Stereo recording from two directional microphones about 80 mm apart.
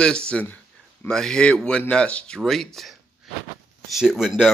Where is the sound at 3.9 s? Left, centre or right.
Centre.